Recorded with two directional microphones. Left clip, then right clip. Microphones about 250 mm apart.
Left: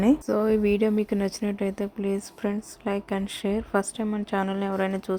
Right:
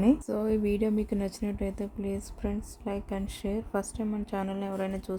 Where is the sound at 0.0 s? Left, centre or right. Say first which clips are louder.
Left 5 dB; centre.